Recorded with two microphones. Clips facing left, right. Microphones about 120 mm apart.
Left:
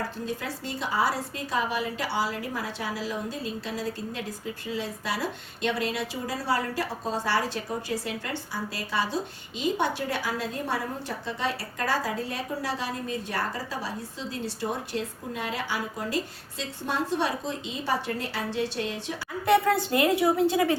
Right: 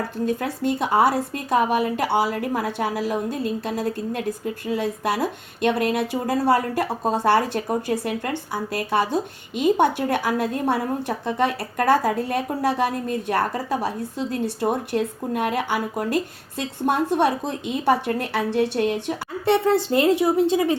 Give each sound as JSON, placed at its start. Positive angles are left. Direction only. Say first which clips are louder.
{"t": 0.3, "sound": "speech", "louder": "right 10 dB", "side_deg": -55}
{"t": 19.5, "sound": "a woman's voice", "louder": "right 3 dB", "side_deg": -25}